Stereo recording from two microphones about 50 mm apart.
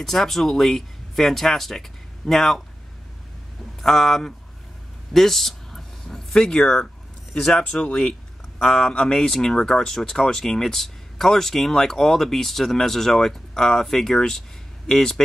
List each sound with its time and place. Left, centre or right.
0.0 s speech: centre
3.8 s speech: centre
5.1 s a sound: centre
6.6 s speech: centre